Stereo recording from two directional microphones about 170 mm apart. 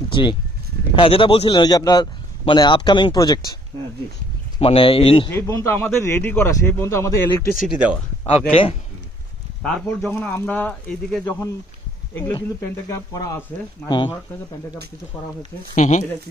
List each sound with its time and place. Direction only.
0.1 s a man's voice: 25° left (ahead or behind)
4.6 s speech: 30° left (ahead or behind)
5.3 s speech: 15° left (ahead or behind)
7.6 s speech: 5° right (ahead or behind)
8.3 s speech: 35° left (ahead or behind)
9.6 s speech: 5° left (ahead or behind)
11.2 s speech: 15° left (ahead or behind)
13.8 s a man's voice: 25° left (ahead or behind)
15.7 s speech: 45° left (ahead or behind)